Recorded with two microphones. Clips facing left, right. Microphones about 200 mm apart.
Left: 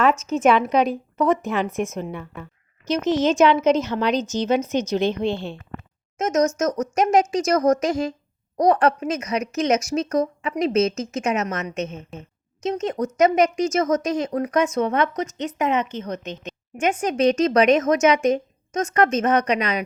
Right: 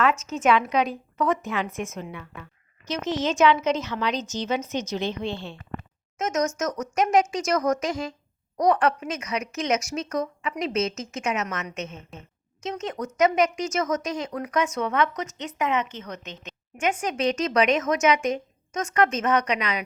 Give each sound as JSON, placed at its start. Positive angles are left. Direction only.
{"t": 1.4, "sound": "a woman's voice", "side_deg": 50}
{"t": 6.1, "sound": "a woman's voice", "side_deg": 40}
{"t": 12.1, "sound": "a woman's voice", "side_deg": 0}
{"t": 12.6, "sound": "a woman's voice", "side_deg": 35}